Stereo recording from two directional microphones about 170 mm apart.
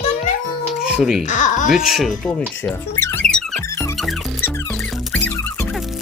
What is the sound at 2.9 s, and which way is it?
Music, 15° left (ahead or behind).